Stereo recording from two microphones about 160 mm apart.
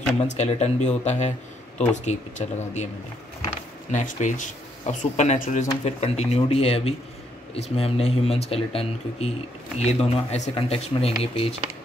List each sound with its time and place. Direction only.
0.2 s speech: 45° left (ahead or behind)